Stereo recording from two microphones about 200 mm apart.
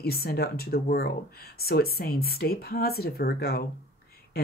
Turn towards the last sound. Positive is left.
turn(degrees=50)  # may be behind; listen again after turning